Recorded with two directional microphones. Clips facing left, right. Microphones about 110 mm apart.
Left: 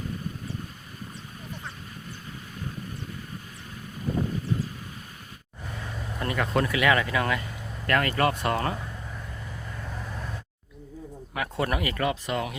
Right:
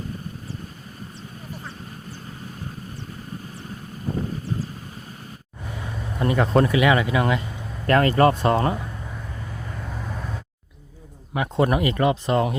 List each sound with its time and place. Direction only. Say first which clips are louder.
6.1 s speech: right 7 dB; 25° right (ahead or behind)
11.3 s speech: right 7 dB; 25° right (ahead or behind)